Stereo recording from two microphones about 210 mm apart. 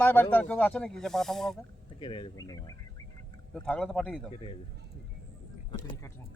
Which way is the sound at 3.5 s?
5° left (ahead or behind).